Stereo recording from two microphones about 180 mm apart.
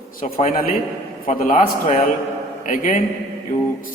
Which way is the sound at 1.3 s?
40° left (ahead or behind).